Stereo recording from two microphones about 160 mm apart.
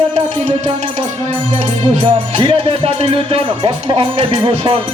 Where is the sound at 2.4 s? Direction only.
30° right (ahead or behind).